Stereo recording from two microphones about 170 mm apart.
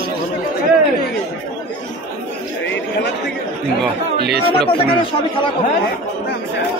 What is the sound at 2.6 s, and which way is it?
Chatter, 90° left.